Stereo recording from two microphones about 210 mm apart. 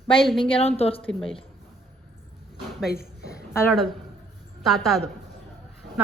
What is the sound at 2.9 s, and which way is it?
Speech, 50° left (ahead or behind).